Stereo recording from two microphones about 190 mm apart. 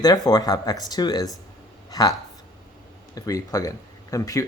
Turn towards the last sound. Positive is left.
turn(degrees=15)  # may be behind; listen again after turning